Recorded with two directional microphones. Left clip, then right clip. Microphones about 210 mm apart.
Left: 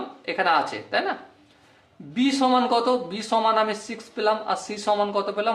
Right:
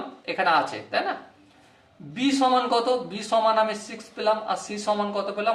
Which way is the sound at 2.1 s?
35° left (ahead or behind).